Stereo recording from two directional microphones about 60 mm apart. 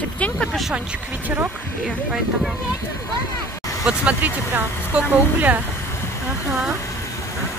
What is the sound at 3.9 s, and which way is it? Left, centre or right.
Speech, right.